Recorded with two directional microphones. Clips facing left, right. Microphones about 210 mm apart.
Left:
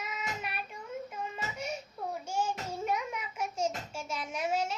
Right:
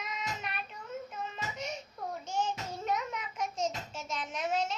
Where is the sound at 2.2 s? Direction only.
10° left (ahead or behind).